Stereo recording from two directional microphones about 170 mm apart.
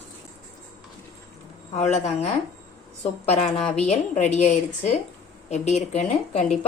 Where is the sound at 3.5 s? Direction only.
5° left (ahead or behind).